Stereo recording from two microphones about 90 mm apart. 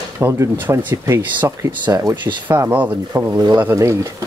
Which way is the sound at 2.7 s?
20° right (ahead or behind).